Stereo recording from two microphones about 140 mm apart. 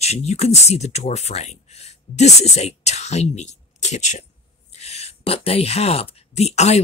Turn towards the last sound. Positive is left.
turn(degrees=50)  # may be behind; listen again after turning